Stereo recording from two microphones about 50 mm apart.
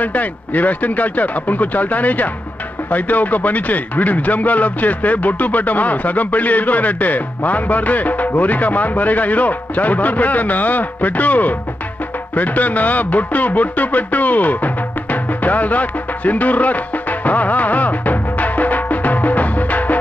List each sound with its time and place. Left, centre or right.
0.0 s speech: left